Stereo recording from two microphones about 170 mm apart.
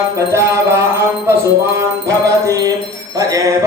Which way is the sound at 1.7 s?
20° right (ahead or behind).